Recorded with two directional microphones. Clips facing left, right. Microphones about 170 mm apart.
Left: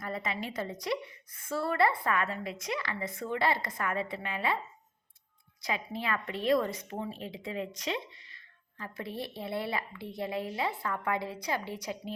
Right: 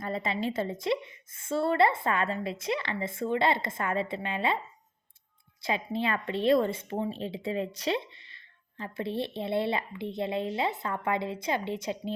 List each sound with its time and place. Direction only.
0.0 s a woman's voice: 25° right (ahead or behind)
5.6 s a woman's voice: 25° right (ahead or behind)